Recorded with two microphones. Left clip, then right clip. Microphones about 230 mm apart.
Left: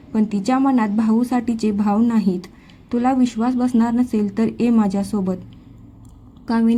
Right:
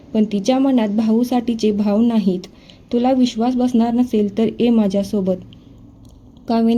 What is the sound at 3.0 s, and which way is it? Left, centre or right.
A woman's voice, left.